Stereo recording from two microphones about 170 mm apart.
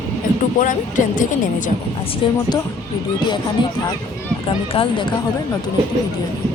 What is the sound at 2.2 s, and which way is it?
Speech, 30° left (ahead or behind).